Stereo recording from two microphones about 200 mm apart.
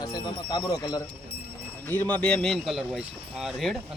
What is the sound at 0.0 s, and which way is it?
Speech, 20° left (ahead or behind).